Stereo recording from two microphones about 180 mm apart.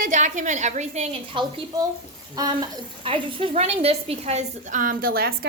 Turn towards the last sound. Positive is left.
turn(degrees=-60)  # may be behind; listen again after turning